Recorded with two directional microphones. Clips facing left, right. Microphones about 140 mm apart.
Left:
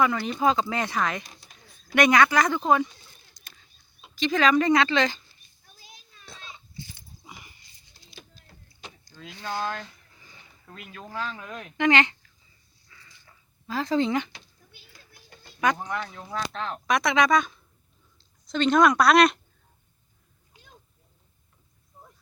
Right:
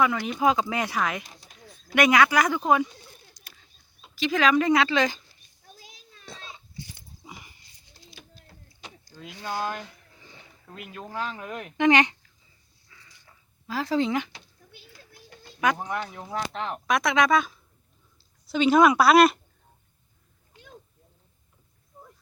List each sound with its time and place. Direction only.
0.0 s speech: 5° right (ahead or behind)
4.1 s speech: 5° right (ahead or behind)
5.7 s children playing: 90° right
6.2 s a sound: centre (ahead or behind)
9.0 s speech: 10° right (ahead or behind)
10.9 s speech: 15° right (ahead or behind)
12.9 s dog: 10° right (ahead or behind)
15.6 s speech: 5° right (ahead or behind)
16.1 s speech: 20° right (ahead or behind)
16.8 s a woman's voice: centre (ahead or behind)
20.5 s cat: 15° left (ahead or behind)